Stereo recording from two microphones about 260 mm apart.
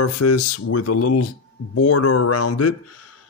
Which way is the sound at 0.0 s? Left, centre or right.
Left.